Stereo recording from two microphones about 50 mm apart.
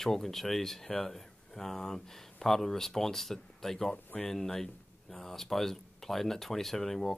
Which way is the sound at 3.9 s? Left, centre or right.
Left.